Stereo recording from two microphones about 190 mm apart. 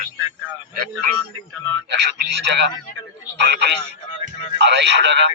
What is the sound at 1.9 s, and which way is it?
A man's voice, 65° right (ahead or behind).